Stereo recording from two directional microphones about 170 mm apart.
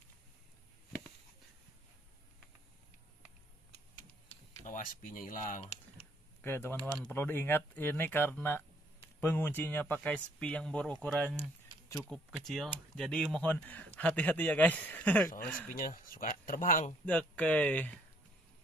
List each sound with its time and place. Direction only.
4.6 s speech: 50° left (ahead or behind)
6.4 s speech: 15° left (ahead or behind)
15.7 s speech: 55° left (ahead or behind)
17.0 s speech: 5° left (ahead or behind)